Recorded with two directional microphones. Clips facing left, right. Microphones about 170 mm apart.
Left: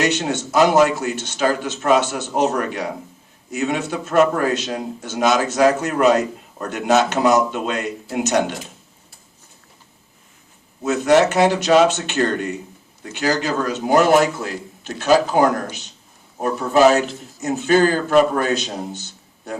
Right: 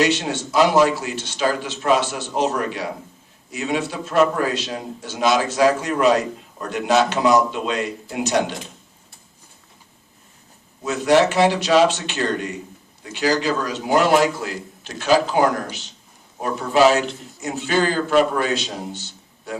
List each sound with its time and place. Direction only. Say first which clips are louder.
0.0 s a man's voice: even; 50° left (ahead or behind)
10.8 s a man's voice: left 2 dB; 45° left (ahead or behind)